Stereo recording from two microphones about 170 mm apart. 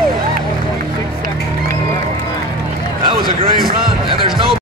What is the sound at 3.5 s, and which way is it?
Speech, 60° right (ahead or behind).